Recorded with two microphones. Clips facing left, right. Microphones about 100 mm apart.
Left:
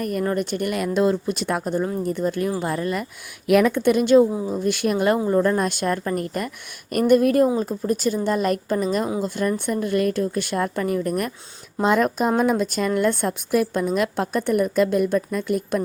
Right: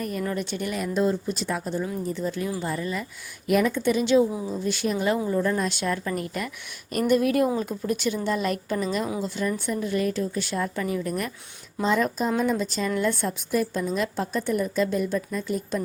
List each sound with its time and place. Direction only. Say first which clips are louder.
0.0 s a woman's voice: left 5 dB; 50° left (ahead or behind)
7.6 s a woman's voice: left 4 dB; 35° left (ahead or behind); by 15.8 s 60° left (ahead or behind)